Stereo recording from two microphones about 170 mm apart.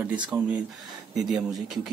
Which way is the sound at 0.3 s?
15° right (ahead or behind).